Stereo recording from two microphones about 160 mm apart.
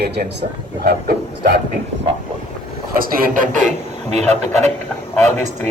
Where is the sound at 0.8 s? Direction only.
70° right (ahead or behind).